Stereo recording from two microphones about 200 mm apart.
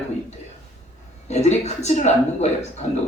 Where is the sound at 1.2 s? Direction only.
35° left (ahead or behind).